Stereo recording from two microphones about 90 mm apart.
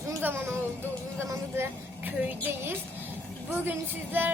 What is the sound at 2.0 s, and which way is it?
A woman's voice, 20° right (ahead or behind).